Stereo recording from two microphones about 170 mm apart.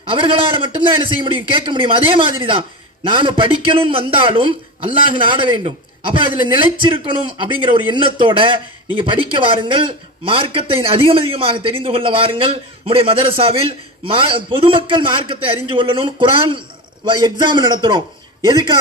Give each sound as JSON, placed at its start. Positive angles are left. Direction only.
{"t": 0.0, "sound": "a man's voice", "side_deg": -30}